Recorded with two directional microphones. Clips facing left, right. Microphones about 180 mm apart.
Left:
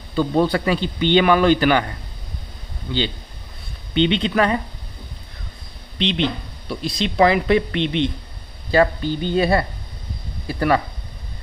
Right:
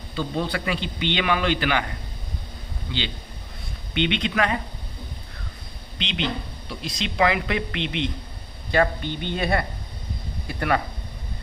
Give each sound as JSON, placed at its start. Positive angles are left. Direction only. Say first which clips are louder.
{"t": 0.1, "sound": "a man's voice", "louder": "left 9 dB", "side_deg": 45}
{"t": 3.9, "sound": "a man's voice", "louder": "left 6 dB", "side_deg": 30}
{"t": 5.9, "sound": "a man's voice", "louder": "left 6 dB", "side_deg": 35}